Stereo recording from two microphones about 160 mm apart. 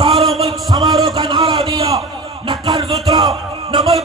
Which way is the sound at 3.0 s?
25° right (ahead or behind).